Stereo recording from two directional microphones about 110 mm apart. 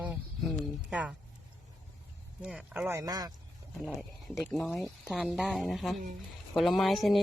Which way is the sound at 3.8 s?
Centre (ahead or behind).